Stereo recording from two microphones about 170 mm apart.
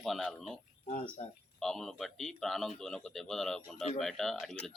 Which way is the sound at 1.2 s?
45° left (ahead or behind).